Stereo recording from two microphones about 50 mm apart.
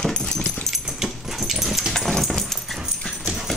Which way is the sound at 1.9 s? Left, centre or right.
Centre.